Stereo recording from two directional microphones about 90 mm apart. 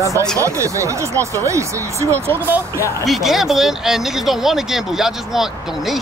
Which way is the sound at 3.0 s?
Centre (ahead or behind).